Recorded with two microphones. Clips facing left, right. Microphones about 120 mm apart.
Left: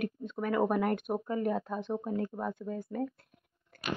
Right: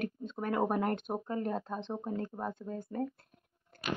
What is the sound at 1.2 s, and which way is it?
A woman's voice, 30° right (ahead or behind).